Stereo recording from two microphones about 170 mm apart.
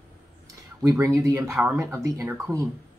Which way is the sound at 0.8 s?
20° right (ahead or behind).